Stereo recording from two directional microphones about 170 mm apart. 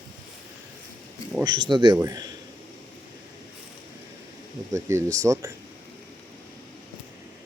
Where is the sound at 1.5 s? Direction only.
25° right (ahead or behind).